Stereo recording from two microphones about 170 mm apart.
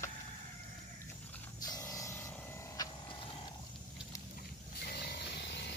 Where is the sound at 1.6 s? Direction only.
20° left (ahead or behind).